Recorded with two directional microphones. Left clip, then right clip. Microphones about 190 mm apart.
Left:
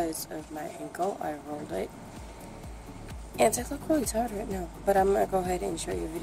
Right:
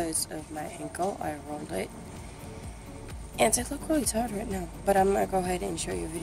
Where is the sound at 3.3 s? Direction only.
5° left (ahead or behind).